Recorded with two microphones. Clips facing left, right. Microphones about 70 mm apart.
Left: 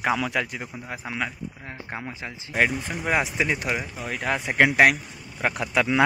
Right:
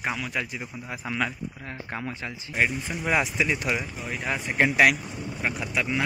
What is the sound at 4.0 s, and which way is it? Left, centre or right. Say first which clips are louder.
Speech: left 3 dB; left.